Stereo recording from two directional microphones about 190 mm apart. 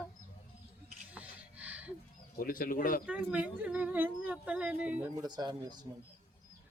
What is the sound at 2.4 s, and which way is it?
Speech, 45° left (ahead or behind).